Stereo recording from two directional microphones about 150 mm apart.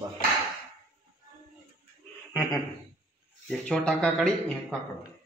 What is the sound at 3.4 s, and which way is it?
Speech, 5° left (ahead or behind).